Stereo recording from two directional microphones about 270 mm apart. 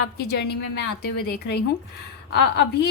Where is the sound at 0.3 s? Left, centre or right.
Left.